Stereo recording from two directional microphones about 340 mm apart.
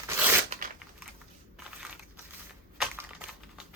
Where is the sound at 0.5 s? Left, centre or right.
Centre.